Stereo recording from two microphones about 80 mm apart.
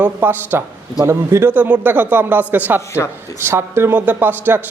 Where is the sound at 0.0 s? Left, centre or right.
Right.